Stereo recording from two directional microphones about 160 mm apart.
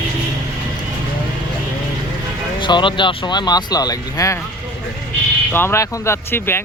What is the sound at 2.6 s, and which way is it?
Speech, 30° left (ahead or behind).